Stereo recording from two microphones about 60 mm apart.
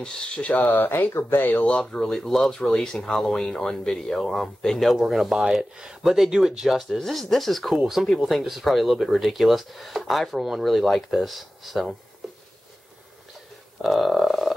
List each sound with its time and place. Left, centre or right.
0.0 s speech: centre
0.7 s speech: left
1.8 s speech: centre
13.7 s a sound: centre